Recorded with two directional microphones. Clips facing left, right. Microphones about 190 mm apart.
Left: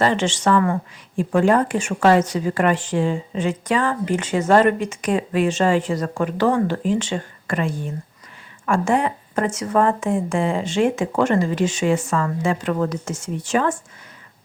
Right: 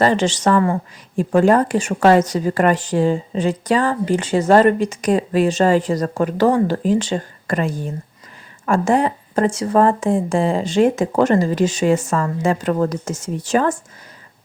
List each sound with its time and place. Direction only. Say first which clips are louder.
0.0 s a woman's voice: right 3 dB; 40° right (ahead or behind)